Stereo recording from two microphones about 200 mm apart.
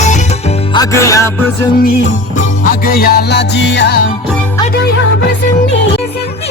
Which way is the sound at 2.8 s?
50° left (ahead or behind).